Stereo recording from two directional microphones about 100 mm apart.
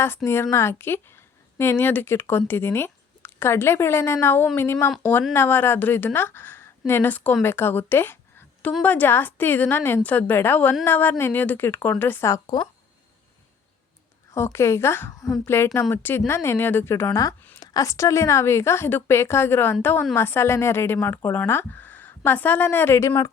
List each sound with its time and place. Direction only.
0.3 s a woman's voice: 25° left (ahead or behind)
12.3 s speech: 40° left (ahead or behind)
14.3 s a woman's voice: 25° left (ahead or behind)